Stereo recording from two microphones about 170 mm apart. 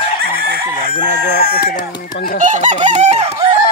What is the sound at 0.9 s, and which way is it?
Chicken, 60° left (ahead or behind).